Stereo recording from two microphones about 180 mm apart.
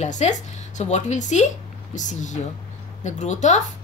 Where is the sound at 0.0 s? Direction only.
40° left (ahead or behind).